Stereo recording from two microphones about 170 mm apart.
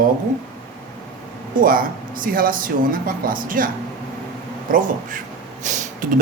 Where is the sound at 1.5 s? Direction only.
55° right (ahead or behind).